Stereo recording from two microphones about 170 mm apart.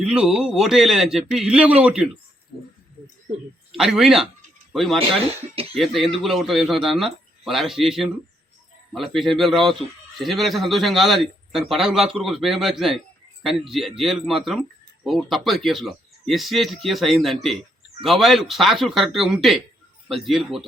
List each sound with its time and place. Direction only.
0.0 s speech: 5° right (ahead or behind)
3.7 s speech: centre (ahead or behind)
5.1 s speech: 35° right (ahead or behind)
5.7 s speech: centre (ahead or behind)